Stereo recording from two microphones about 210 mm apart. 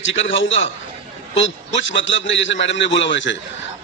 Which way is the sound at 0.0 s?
60° left (ahead or behind).